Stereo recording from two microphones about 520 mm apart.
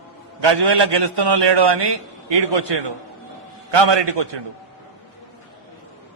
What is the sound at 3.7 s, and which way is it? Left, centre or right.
Speech, right.